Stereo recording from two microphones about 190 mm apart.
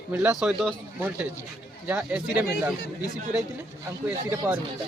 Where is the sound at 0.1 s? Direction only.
5° right (ahead or behind).